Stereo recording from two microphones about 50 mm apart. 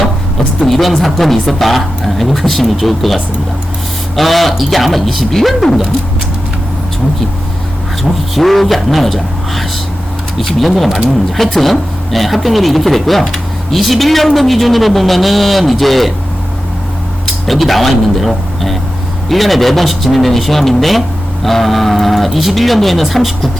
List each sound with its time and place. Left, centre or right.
0.6 s speech: centre
4.2 s speech: centre
8.4 s speech: centre
17.4 s speech: centre